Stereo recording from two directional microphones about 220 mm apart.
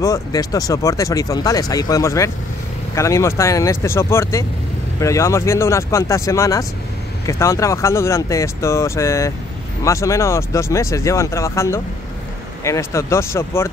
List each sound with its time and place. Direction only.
0.0 s speech: 15° left (ahead or behind)